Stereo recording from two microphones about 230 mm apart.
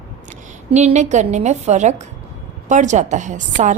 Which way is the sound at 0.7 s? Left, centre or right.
Right.